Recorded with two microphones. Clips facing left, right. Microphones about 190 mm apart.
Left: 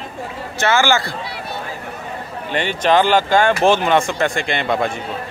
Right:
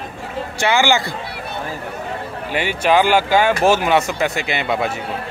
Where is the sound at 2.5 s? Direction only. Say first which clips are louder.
Even; 10° right (ahead or behind).